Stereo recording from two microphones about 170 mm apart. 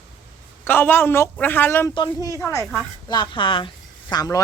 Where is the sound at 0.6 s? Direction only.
15° left (ahead or behind).